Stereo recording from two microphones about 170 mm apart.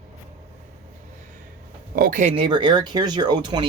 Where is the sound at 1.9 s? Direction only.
55° right (ahead or behind).